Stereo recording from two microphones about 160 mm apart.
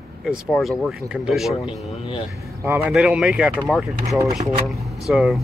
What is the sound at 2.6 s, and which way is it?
Speech, 15° right (ahead or behind).